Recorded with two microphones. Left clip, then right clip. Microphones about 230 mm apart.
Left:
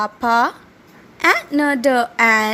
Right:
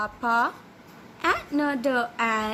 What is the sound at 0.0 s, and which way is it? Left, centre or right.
A woman's voice, left.